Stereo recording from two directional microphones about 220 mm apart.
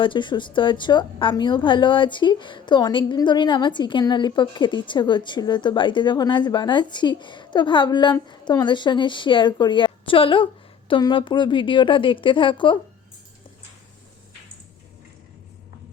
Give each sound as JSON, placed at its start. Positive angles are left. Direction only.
{"t": 0.0, "sound": "a woman's voice", "side_deg": 20}